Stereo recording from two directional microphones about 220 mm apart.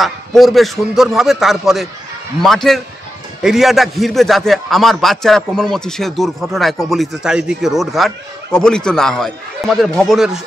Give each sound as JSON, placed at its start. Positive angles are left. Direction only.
{"t": 0.0, "sound": "a man's voice", "side_deg": 0}